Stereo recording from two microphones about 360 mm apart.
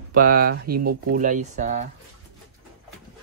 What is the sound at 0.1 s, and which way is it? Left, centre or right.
Speech, right.